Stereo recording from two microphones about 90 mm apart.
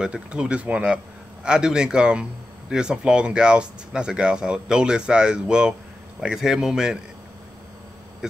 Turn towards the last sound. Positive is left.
turn(degrees=-5)  # may be behind; listen again after turning